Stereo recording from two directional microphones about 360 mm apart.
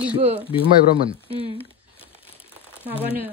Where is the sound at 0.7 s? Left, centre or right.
Centre.